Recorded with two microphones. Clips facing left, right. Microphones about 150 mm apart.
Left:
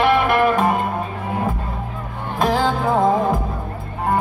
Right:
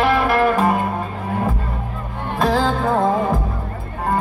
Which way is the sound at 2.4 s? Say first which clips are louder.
Even; 15° left (ahead or behind).